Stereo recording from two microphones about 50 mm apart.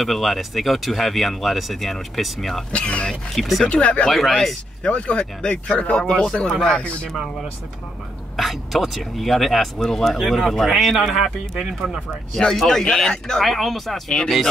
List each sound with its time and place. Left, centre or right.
0.0 s speech: centre
2.7 s speech: centre
3.3 s speech: centre
3.6 s speech: left
4.1 s speech: centre
4.8 s speech: centre
7.1 s speech: centre
12.4 s speech: centre
13.5 s speech: centre